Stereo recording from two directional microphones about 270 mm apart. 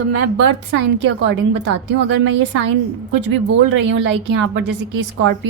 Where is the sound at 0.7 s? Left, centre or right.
Right.